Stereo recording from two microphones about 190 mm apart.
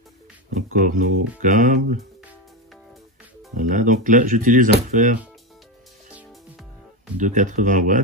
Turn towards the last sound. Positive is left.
turn(degrees=-40)  # may be behind; listen again after turning